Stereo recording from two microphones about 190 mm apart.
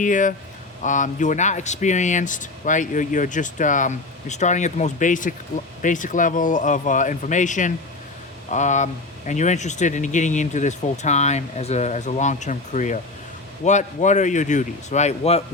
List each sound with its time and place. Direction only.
0.0 s speech: 45° left (ahead or behind)